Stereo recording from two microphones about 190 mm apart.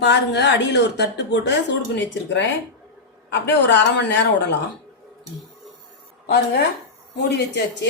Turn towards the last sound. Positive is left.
turn(degrees=65)  # may be behind; listen again after turning